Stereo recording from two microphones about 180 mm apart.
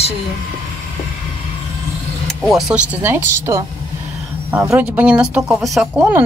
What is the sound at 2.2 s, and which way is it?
Speech, centre (ahead or behind).